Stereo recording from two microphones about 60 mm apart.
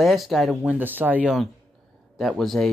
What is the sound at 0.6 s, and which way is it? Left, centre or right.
Speech, right.